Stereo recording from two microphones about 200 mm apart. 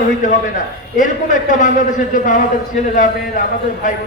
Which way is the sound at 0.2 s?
40° left (ahead or behind).